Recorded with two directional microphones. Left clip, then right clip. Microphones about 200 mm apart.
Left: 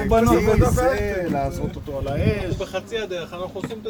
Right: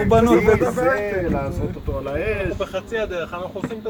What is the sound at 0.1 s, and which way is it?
Speech, 25° right (ahead or behind).